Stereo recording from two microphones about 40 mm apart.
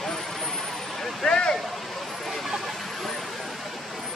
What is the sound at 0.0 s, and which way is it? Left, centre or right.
Vehicle, centre.